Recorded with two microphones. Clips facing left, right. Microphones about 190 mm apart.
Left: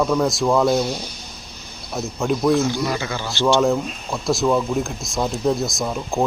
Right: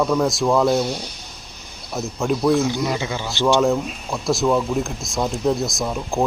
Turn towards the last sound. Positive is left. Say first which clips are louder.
# even
turn(degrees=0)  # may be behind; listen again after turning